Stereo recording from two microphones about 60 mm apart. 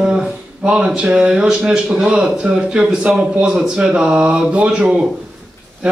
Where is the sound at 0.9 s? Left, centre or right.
Centre.